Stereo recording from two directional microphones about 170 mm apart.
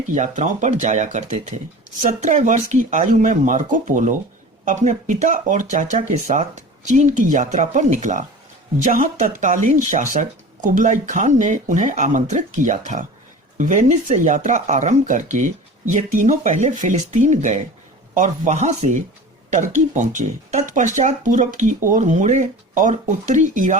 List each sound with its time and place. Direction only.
0.1 s speech: 45° right (ahead or behind)